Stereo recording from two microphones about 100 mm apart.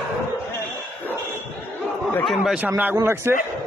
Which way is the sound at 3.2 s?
25° right (ahead or behind).